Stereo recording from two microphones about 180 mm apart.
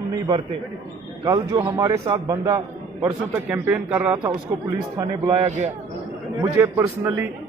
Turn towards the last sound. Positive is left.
turn(degrees=-15)  # may be behind; listen again after turning